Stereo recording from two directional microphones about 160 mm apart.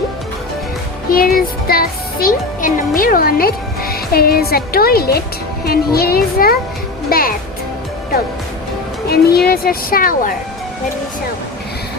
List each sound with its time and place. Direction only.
1.1 s speech: 65° left (ahead or behind)
9.0 s speech: 75° left (ahead or behind)